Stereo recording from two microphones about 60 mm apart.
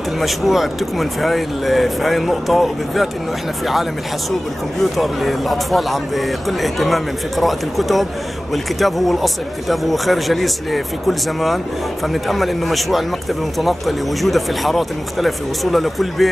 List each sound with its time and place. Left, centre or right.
0.2 s a man's voice: centre
4.9 s a man's voice: centre